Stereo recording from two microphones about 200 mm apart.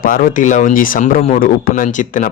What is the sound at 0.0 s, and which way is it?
A man's voice, 45° left (ahead or behind).